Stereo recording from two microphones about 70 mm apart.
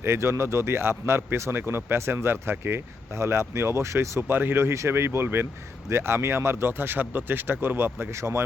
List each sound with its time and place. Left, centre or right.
0.0 s speech: right
4.2 s speech: right